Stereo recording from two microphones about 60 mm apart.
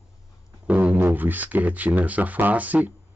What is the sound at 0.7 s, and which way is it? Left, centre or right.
Speech, right.